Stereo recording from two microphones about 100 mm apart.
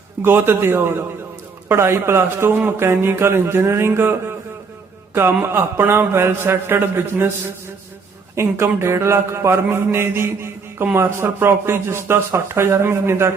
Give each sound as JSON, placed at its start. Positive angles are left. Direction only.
{"t": 0.2, "sound": "a man's voice", "side_deg": -20}
{"t": 8.4, "sound": "a man's voice", "side_deg": -25}